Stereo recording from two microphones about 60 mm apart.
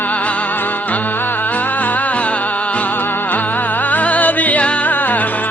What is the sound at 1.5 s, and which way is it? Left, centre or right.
Music, left.